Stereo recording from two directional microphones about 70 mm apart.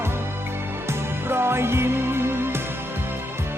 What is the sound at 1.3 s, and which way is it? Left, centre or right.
Music, right.